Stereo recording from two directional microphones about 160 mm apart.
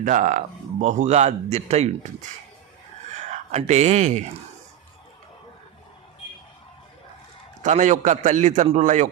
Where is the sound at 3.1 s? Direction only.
45° right (ahead or behind).